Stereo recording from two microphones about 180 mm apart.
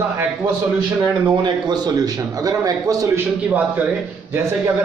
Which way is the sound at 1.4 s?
25° right (ahead or behind).